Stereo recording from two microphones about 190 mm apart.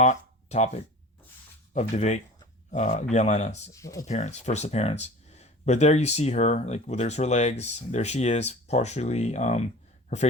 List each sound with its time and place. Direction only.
0.0 s speech: 35° left (ahead or behind)
3.7 s speech: 15° left (ahead or behind)
4.0 s speech: 35° left (ahead or behind)